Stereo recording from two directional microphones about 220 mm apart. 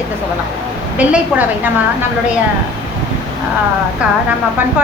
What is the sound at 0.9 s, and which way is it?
Speech, 5° right (ahead or behind).